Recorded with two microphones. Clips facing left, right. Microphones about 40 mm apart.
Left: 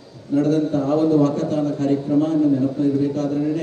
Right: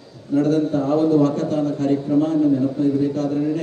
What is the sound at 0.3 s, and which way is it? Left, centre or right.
A man's voice, right.